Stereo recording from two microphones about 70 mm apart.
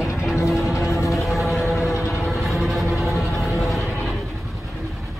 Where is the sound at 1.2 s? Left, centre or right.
Centre.